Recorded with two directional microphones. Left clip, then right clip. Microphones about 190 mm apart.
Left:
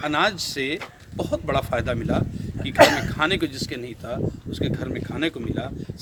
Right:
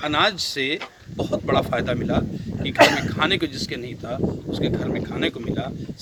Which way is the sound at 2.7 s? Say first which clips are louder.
Even; 40° left (ahead or behind).